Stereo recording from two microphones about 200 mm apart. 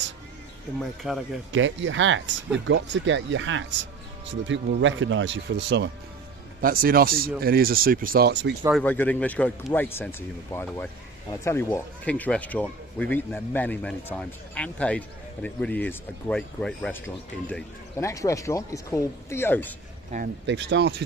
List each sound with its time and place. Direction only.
0.7 s speech: centre (ahead or behind)
1.5 s speech: 70° right (ahead or behind)
6.6 s speech: 45° right (ahead or behind)
8.7 s speech: 10° left (ahead or behind)
20.4 s speech: 60° right (ahead or behind)